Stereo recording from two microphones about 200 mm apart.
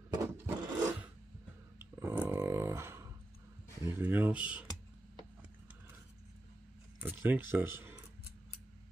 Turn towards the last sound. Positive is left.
turn(degrees=-10)  # may be behind; listen again after turning